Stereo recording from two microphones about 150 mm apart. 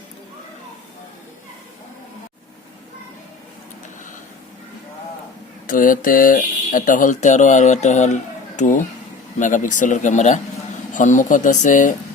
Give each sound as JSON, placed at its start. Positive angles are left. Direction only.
{"t": 5.6, "sound": "speech", "side_deg": 65}